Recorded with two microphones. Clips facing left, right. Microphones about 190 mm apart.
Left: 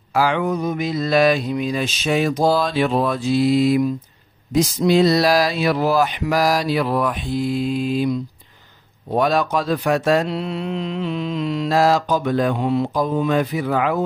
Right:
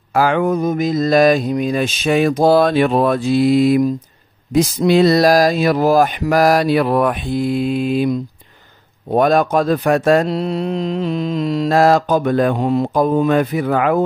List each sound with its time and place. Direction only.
0.1 s speech: 50° right (ahead or behind)
4.6 s mantra: 65° right (ahead or behind)
9.1 s speech: 50° right (ahead or behind)